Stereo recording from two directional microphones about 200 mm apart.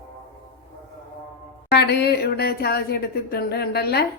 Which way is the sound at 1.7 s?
55° left (ahead or behind).